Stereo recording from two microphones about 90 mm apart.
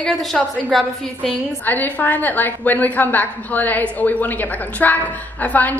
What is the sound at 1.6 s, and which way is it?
A woman's voice, 20° left (ahead or behind).